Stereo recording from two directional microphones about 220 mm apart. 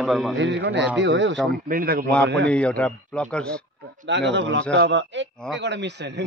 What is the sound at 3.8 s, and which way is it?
Speech, 50° right (ahead or behind).